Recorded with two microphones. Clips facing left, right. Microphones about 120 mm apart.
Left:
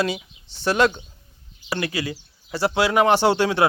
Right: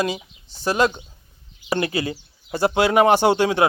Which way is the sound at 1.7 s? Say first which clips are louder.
Right 3 dB; 25° right (ahead or behind).